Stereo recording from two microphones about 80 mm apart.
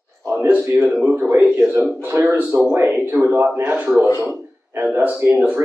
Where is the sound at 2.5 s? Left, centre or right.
Right.